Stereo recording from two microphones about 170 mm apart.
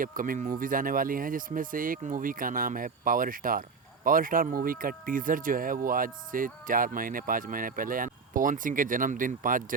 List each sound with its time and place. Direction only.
0.0 s speech: 55° right (ahead or behind)